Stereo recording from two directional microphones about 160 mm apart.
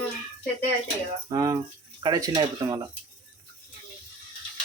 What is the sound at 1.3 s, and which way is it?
Speech, 25° right (ahead or behind).